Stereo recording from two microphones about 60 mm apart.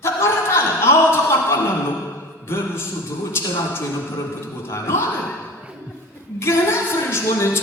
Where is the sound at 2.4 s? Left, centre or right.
Left.